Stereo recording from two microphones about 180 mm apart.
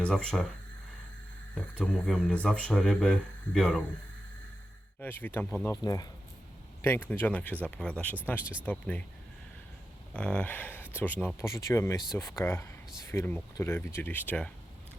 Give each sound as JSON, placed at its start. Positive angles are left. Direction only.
{"t": 0.0, "sound": "speech", "side_deg": 5}
{"t": 1.8, "sound": "speech", "side_deg": 5}
{"t": 4.9, "sound": "speech", "side_deg": 10}
{"t": 10.1, "sound": "speech", "side_deg": 5}